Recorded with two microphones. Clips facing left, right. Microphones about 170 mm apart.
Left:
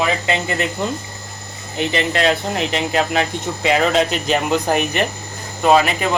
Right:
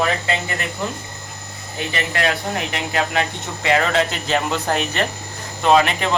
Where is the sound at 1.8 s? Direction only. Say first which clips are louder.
Left 5 dB; 20° left (ahead or behind).